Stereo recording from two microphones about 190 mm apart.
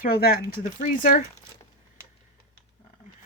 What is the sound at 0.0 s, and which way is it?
Speech, 50° left (ahead or behind).